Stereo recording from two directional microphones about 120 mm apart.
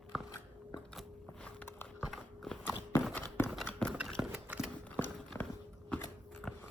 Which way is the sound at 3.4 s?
5° left (ahead or behind).